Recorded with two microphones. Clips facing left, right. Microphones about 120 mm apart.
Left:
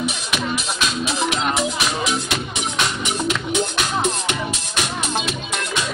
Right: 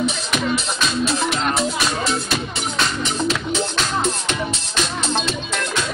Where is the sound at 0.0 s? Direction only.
10° left (ahead or behind).